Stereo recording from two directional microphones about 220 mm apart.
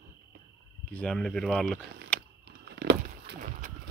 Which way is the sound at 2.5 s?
50° right (ahead or behind).